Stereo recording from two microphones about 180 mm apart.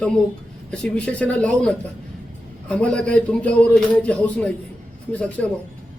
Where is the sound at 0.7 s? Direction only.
5° left (ahead or behind).